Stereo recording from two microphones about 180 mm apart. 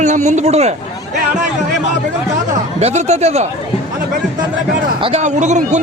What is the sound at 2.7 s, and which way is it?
Speech, 40° right (ahead or behind).